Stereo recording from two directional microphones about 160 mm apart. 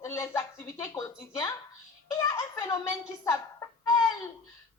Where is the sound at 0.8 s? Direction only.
20° left (ahead or behind).